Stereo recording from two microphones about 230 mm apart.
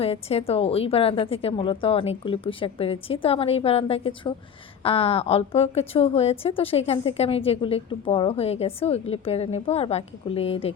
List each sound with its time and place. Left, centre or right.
0.0 s a woman's voice: left